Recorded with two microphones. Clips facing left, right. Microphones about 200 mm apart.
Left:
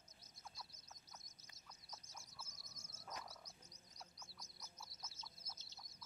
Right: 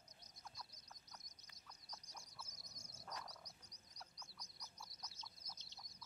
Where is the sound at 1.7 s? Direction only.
5° left (ahead or behind).